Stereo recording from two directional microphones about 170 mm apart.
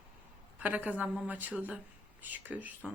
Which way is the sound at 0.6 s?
10° right (ahead or behind).